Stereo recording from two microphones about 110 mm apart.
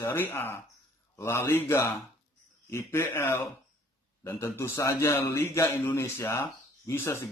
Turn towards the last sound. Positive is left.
turn(degrees=25)  # may be behind; listen again after turning